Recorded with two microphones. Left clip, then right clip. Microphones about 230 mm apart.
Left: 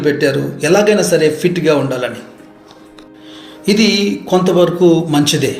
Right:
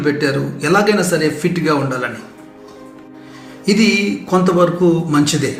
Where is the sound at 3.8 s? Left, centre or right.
Centre.